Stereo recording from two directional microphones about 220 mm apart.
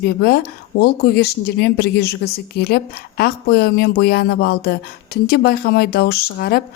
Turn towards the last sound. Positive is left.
turn(degrees=45)  # may be behind; listen again after turning